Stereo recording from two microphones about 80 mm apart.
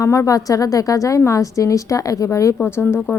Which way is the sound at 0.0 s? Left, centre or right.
Left.